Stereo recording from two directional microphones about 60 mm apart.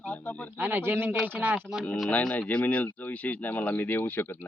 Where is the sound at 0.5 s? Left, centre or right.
Right.